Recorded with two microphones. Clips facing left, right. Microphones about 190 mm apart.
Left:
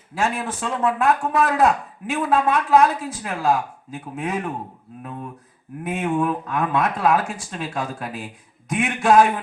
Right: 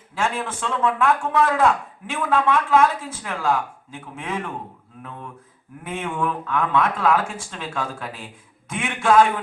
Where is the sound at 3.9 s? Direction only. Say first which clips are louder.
Left 3 dB; 35° left (ahead or behind).